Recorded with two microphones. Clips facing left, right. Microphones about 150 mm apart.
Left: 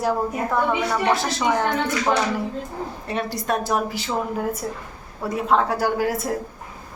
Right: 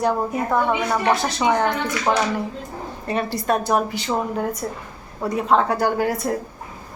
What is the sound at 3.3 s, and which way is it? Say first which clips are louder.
Speech: right 3 dB; centre (ahead or behind).